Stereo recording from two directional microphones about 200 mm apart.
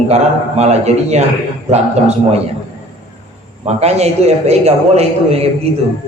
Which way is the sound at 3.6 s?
30° right (ahead or behind).